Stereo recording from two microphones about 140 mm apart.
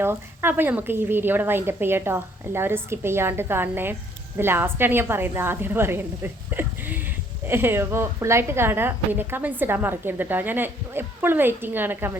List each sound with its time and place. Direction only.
0.0 s a woman's voice: 15° right (ahead or behind)